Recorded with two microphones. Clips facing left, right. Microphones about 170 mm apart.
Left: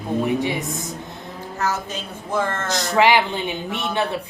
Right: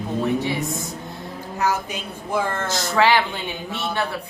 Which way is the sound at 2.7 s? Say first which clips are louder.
Left 2 dB; 20° left (ahead or behind).